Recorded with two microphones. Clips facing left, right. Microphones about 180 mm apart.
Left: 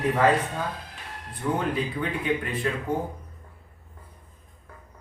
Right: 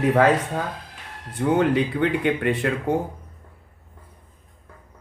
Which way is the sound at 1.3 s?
75° right (ahead or behind).